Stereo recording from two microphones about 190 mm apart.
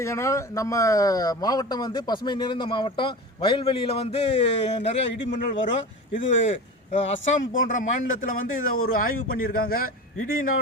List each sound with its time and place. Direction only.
0.0 s a man's voice: 15° left (ahead or behind); by 7.1 s 35° left (ahead or behind)
7.5 s speech: 45° left (ahead or behind)